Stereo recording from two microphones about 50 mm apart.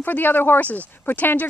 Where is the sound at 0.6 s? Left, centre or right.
Left.